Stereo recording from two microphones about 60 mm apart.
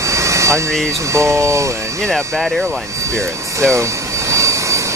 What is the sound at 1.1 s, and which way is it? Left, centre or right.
Speech, right.